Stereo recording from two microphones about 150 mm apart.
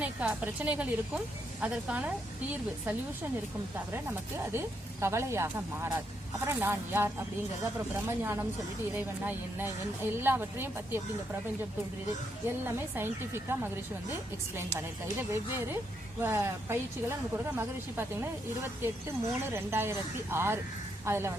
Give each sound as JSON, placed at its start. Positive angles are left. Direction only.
{"t": 0.0, "sound": "speech", "side_deg": -10}
{"t": 4.5, "sound": "speech", "side_deg": -15}
{"t": 12.6, "sound": "speech", "side_deg": -15}
{"t": 15.3, "sound": "speech", "side_deg": -15}